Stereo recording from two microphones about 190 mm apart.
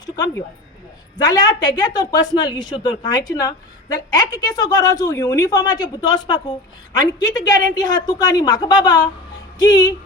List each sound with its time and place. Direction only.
1.2 s speech: 20° left (ahead or behind)